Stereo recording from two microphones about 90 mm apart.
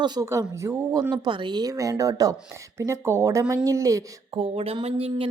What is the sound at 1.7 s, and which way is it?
A woman's voice, 40° right (ahead or behind).